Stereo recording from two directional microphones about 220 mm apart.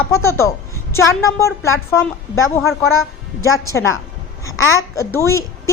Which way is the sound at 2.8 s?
70° left (ahead or behind).